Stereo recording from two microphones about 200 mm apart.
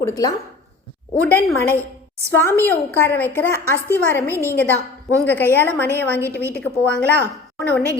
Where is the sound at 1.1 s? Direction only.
5° left (ahead or behind).